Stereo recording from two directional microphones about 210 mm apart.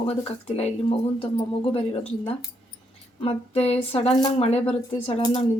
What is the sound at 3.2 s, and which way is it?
Speech, 30° left (ahead or behind).